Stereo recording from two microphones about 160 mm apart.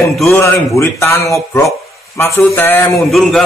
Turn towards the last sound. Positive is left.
turn(degrees=0)  # may be behind; listen again after turning